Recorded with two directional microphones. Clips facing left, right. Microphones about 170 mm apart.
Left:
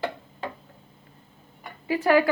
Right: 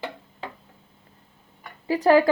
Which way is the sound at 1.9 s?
35° right (ahead or behind).